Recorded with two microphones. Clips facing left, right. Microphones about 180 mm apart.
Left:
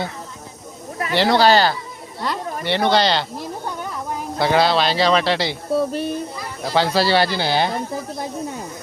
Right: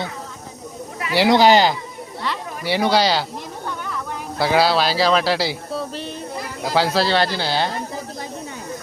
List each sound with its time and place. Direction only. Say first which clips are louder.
1.1 s speech: right 1 dB; 15° right (ahead or behind)
4.4 s a man's voice: even; 5° right (ahead or behind)
5.9 s speech: left 7 dB; 55° left (ahead or behind)
6.6 s a man's voice: left 1 dB; 5° right (ahead or behind)
7.3 s speech: left 2 dB; 15° left (ahead or behind)